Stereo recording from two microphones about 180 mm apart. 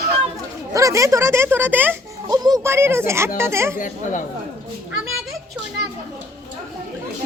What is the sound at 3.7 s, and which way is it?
Speech, 45° left (ahead or behind).